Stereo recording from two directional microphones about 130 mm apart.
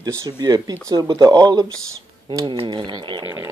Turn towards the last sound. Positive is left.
turn(degrees=-35)  # may be behind; listen again after turning